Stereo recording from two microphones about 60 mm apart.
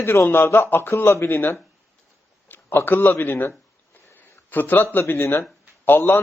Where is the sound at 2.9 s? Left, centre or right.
Left.